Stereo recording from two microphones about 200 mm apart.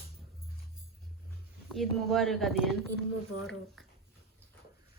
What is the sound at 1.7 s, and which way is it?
Speech, centre (ahead or behind).